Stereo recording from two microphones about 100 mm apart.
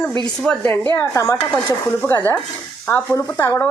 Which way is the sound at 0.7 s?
25° left (ahead or behind).